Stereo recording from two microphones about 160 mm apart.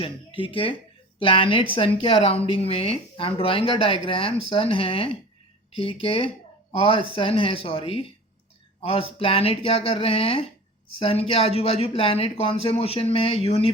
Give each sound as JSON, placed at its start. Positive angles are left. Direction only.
{"t": 0.0, "sound": "speech", "side_deg": 35}